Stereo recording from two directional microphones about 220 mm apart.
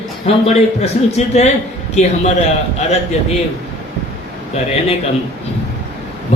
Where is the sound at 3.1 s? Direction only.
30° left (ahead or behind).